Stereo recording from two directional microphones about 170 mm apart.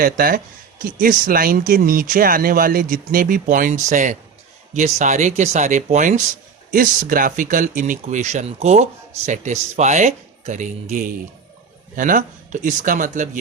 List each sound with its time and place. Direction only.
0.0 s speech: 55° right (ahead or behind)